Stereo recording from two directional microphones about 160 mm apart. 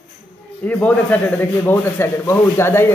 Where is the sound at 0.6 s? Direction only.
10° left (ahead or behind).